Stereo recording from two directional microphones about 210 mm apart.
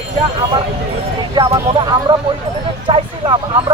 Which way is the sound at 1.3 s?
20° right (ahead or behind).